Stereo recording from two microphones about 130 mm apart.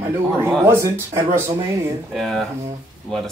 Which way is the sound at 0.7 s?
20° right (ahead or behind).